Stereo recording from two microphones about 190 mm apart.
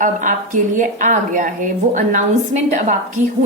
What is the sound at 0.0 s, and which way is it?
A woman's voice, 45° right (ahead or behind).